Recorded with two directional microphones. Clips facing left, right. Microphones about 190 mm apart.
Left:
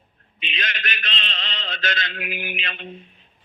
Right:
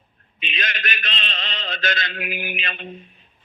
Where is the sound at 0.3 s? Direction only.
45° right (ahead or behind).